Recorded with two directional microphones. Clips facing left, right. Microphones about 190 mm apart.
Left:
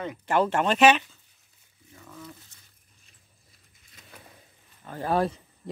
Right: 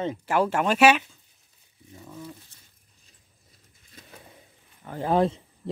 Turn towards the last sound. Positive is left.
turn(degrees=-20)  # may be behind; listen again after turning